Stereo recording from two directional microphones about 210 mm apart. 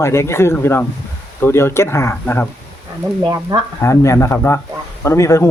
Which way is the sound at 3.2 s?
20° right (ahead or behind).